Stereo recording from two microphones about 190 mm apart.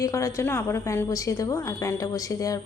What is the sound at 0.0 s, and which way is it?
A woman's voice, 15° left (ahead or behind).